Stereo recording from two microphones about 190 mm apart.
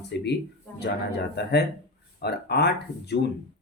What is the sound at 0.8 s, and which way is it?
Speech, 60° left (ahead or behind).